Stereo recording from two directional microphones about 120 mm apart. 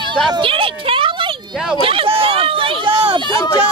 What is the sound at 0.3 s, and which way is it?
Speech, 45° right (ahead or behind).